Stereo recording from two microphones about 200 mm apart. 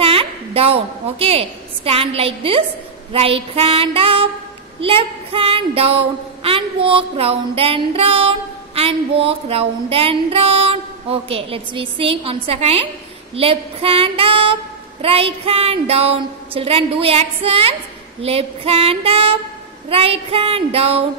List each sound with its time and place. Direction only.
0.0 s a woman's voice: 30° right (ahead or behind)